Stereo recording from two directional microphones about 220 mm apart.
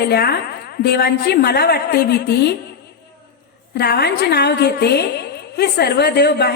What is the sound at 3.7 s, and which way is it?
A woman's voice, 45° left (ahead or behind).